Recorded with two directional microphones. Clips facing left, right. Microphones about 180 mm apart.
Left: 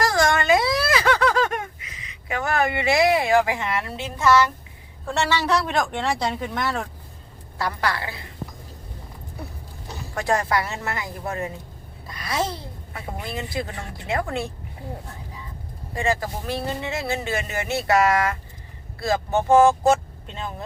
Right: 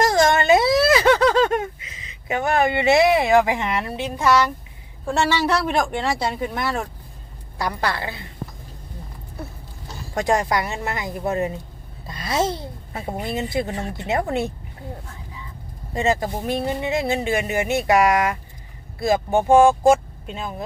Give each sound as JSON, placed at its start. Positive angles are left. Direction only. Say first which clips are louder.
{"t": 0.0, "sound": "a sound", "louder": "right 3 dB", "side_deg": -20}
{"t": 5.6, "sound": "speech", "louder": "right 2 dB", "side_deg": -10}
{"t": 7.6, "sound": "a woman's voice", "louder": "right 1 dB", "side_deg": -25}
{"t": 10.2, "sound": "a woman's voice", "louder": "right 2 dB", "side_deg": -20}
{"t": 16.0, "sound": "speech", "louder": "right 3 dB", "side_deg": -20}